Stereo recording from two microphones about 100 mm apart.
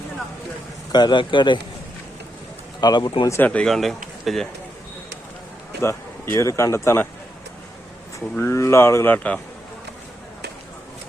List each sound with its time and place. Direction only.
0.9 s speech: 50° left (ahead or behind)
2.8 s speech: 45° left (ahead or behind)
3.4 s speech: 10° left (ahead or behind)
5.8 s speech: 25° left (ahead or behind)
8.4 s speech: 30° left (ahead or behind)